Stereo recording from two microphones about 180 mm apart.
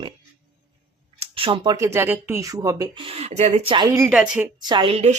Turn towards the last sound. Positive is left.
turn(degrees=-35)  # may be behind; listen again after turning